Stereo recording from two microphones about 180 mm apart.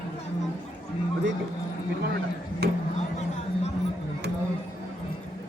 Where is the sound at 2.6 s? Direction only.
60° right (ahead or behind).